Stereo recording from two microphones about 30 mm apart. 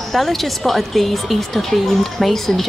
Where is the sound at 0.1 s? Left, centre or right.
Centre.